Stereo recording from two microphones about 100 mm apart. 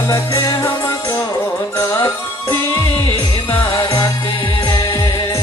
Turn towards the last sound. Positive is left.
turn(degrees=40)  # may be behind; listen again after turning